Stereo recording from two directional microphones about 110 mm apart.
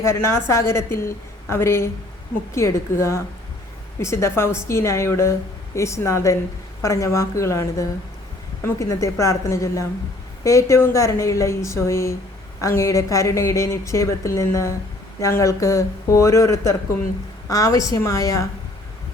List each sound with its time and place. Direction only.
0.0 s a woman's voice: 25° left (ahead or behind)